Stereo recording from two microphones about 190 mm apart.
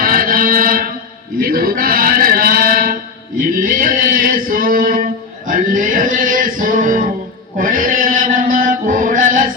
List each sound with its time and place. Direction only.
0.0 s chant: 50° right (ahead or behind)
1.4 s music: 50° right (ahead or behind)
7.5 s chant: 45° right (ahead or behind)